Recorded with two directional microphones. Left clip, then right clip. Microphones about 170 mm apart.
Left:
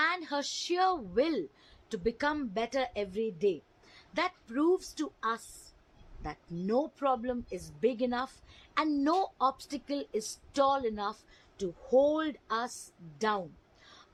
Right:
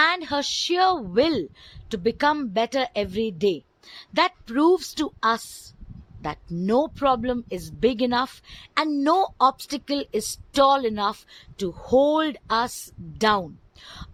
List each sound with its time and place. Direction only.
0.0 s a woman's voice: 45° right (ahead or behind); by 5.4 s 60° right (ahead or behind)
6.6 s a woman's voice: 50° right (ahead or behind)
8.7 s a woman's voice: 30° right (ahead or behind)
9.1 s a woman's voice: 40° right (ahead or behind)
13.8 s a sound: 50° right (ahead or behind)